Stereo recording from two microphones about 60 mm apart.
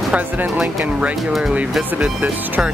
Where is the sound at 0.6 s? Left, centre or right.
Centre.